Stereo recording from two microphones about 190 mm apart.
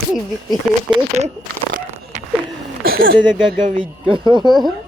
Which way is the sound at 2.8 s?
50° right (ahead or behind).